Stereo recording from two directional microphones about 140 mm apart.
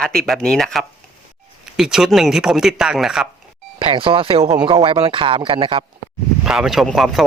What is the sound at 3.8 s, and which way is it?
Speech, 40° right (ahead or behind).